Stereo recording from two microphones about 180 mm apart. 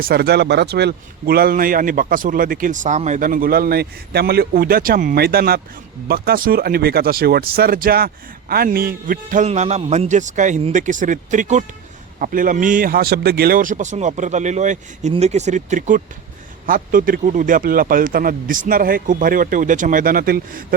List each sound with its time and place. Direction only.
0.0 s a man's voice: 60° right (ahead or behind)